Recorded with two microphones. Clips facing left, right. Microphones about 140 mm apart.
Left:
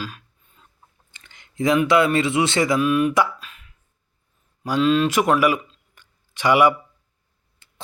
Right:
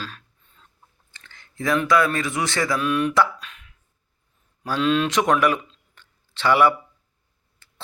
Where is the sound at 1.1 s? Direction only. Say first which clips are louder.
Left 7 dB; 20° left (ahead or behind).